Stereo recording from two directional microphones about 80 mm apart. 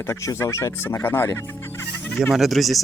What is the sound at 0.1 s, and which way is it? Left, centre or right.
Speech, left.